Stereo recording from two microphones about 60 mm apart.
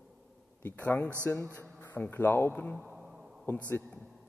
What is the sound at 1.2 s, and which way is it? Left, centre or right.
Speech, left.